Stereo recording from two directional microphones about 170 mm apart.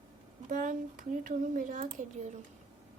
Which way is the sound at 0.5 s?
50° right (ahead or behind).